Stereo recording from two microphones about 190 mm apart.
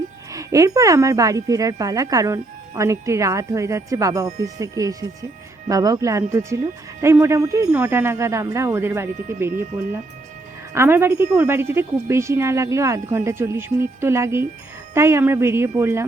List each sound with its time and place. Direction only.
0.3 s speech: 15° right (ahead or behind)
10.8 s speech: 10° right (ahead or behind)